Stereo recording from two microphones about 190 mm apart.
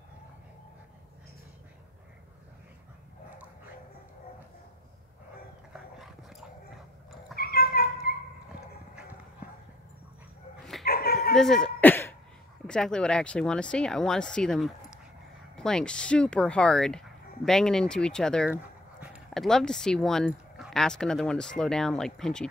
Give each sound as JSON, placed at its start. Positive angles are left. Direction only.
{"t": 7.3, "sound": "cat", "side_deg": 50}
{"t": 10.9, "sound": "dog", "side_deg": 50}
{"t": 11.3, "sound": "throat clearing", "side_deg": 5}
{"t": 12.6, "sound": "speech", "side_deg": 5}